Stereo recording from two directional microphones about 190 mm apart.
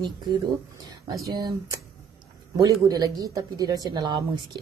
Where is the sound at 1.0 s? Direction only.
20° right (ahead or behind).